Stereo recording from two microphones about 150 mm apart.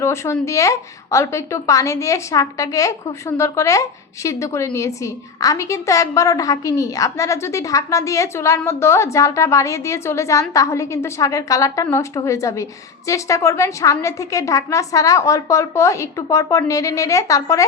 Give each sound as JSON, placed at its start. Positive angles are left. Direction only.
{"t": 0.0, "sound": "a woman's voice", "side_deg": 20}